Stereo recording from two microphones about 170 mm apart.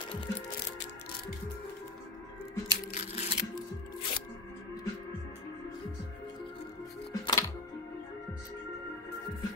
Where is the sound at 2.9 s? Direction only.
40° left (ahead or behind).